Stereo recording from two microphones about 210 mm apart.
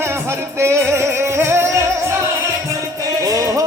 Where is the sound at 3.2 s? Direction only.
15° right (ahead or behind).